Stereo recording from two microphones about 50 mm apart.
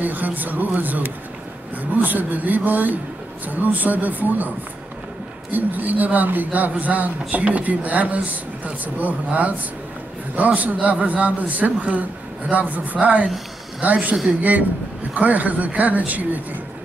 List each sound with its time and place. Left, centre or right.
0.0 s speech: right
5.5 s a man's voice: right
15.1 s speech: right